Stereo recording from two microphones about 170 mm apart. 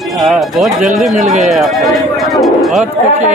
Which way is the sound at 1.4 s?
Centre (ahead or behind).